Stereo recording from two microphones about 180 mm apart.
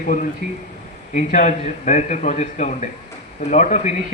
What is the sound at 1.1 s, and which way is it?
A man's voice, 45° left (ahead or behind).